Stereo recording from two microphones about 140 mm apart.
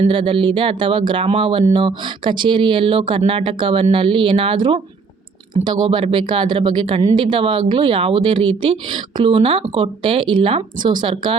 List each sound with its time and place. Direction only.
0.0 s speech: 40° right (ahead or behind)